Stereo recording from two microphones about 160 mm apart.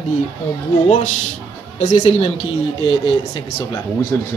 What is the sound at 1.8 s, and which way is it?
A woman's voice, 50° left (ahead or behind).